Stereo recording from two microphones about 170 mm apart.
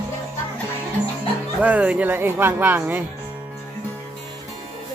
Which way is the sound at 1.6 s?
10° right (ahead or behind).